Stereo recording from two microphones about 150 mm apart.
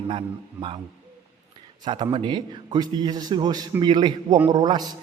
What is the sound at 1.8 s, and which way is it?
A man's voice, 30° right (ahead or behind).